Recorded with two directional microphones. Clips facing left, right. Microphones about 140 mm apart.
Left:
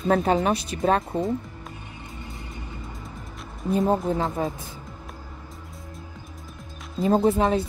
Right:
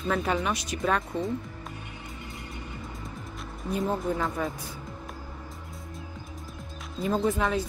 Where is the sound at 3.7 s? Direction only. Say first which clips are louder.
Left 6 dB; 30° left (ahead or behind).